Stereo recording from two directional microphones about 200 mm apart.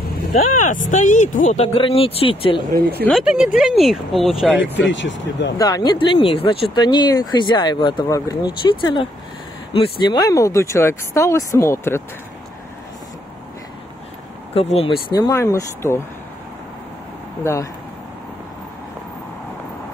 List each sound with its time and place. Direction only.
0.7 s speech: 40° left (ahead or behind)
2.7 s speech: 50° right (ahead or behind)
3.1 s speech: centre (ahead or behind)
4.9 s speech: 65° left (ahead or behind)
5.6 s speech: 20° left (ahead or behind)
14.5 s speech: 30° left (ahead or behind)
15.1 s speech: 15° left (ahead or behind)
17.4 s speech: 15° left (ahead or behind)